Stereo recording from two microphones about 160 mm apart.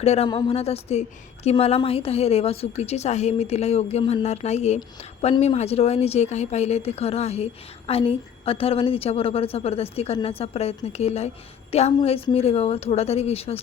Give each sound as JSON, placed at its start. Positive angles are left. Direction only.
{"t": 0.0, "sound": "a woman's voice", "side_deg": 40}